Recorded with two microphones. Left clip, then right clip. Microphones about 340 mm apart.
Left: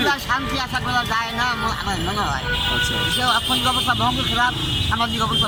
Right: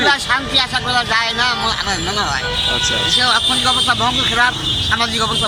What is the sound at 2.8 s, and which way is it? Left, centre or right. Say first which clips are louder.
Speech: right 5 dB; centre.